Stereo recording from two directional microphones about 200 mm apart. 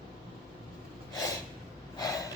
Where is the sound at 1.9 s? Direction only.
20° left (ahead or behind).